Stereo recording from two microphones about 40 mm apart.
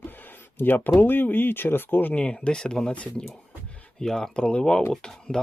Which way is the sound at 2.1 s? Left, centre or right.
Left.